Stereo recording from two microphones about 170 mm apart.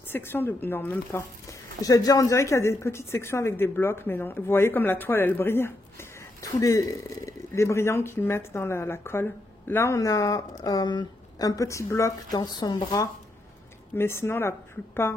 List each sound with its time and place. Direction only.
0.1 s a woman's voice: 10° left (ahead or behind)